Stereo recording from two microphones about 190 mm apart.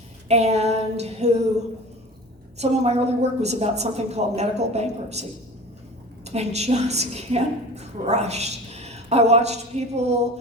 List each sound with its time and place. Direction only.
0.3 s female singing: 35° right (ahead or behind)
2.6 s a woman's voice: 35° right (ahead or behind)
6.2 s a woman's voice: 35° right (ahead or behind)